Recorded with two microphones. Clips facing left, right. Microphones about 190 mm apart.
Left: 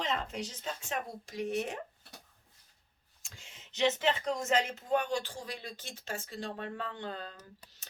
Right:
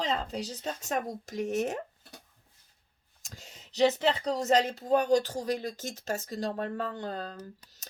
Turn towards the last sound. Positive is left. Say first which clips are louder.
# right 5 dB
turn(degrees=-40)  # may be behind; listen again after turning